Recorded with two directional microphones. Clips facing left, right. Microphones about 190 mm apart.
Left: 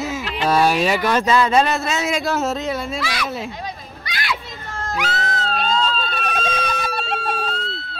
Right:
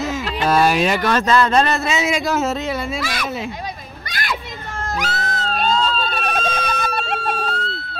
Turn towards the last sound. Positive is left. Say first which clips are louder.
# right 1 dB
turn(degrees=-55)  # may be behind; listen again after turning